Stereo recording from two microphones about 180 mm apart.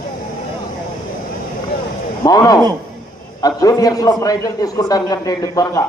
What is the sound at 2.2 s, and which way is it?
A man's voice, 20° left (ahead or behind).